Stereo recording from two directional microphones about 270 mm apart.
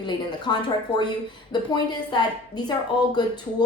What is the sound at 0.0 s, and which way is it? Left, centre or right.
A woman's voice, centre.